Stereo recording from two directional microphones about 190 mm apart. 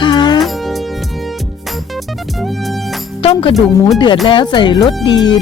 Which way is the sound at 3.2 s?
30° left (ahead or behind).